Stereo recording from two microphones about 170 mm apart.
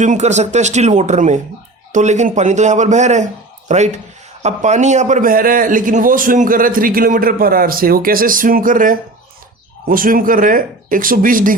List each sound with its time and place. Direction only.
0.0 s a man's voice: 45° right (ahead or behind)